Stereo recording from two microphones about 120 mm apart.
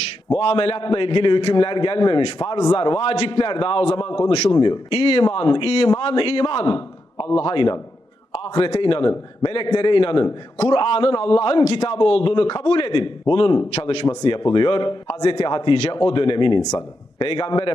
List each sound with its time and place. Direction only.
0.3 s a man's voice: 55° left (ahead or behind)
4.5 s a man's voice: 40° left (ahead or behind)
13.7 s speech: 60° left (ahead or behind)
14.3 s a man's voice: 45° left (ahead or behind)